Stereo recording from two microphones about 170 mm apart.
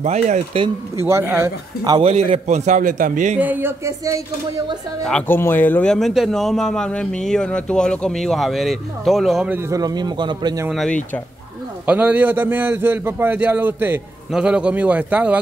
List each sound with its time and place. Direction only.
0.0 s speech: 40° right (ahead or behind)
1.0 s a man's voice: 15° right (ahead or behind)
2.0 s a man's voice: 35° right (ahead or behind)
3.3 s a man's voice: 10° right (ahead or behind)
5.0 s a man's voice: 10° left (ahead or behind)
9.7 s a man's voice: 20° right (ahead or behind)
10.7 s a man's voice: centre (ahead or behind)